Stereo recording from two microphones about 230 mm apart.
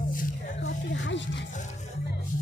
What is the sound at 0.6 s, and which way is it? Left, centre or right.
Music, left.